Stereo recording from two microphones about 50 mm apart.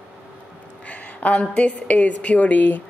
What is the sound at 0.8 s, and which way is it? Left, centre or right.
A woman's voice, left.